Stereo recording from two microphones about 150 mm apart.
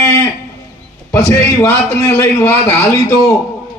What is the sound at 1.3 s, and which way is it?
A man's voice, 20° left (ahead or behind).